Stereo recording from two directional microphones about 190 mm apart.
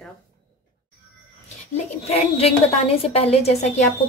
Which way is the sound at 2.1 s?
30° left (ahead or behind).